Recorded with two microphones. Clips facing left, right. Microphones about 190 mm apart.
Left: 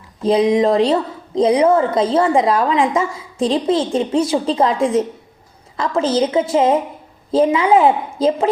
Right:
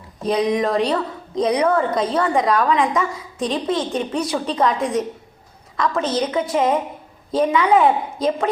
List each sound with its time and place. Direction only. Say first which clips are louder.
0.3 s a woman's voice: left 5 dB; 25° left (ahead or behind)